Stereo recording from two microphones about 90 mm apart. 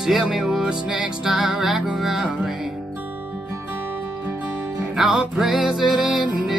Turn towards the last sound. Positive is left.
turn(degrees=-5)  # may be behind; listen again after turning